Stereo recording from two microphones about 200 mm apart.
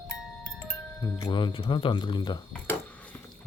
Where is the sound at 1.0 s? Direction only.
15° left (ahead or behind).